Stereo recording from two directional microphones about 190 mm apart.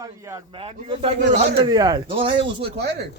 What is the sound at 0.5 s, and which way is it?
Speech, 30° right (ahead or behind).